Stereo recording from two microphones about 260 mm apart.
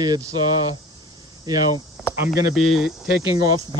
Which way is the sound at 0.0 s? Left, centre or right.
Centre.